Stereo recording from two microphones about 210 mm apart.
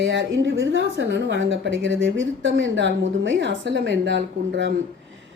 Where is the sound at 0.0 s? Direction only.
60° right (ahead or behind).